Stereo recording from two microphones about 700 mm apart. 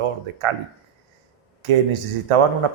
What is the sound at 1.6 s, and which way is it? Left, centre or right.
Speech, right.